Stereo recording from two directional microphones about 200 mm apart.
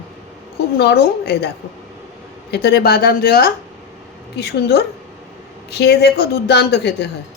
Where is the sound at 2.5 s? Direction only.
55° left (ahead or behind).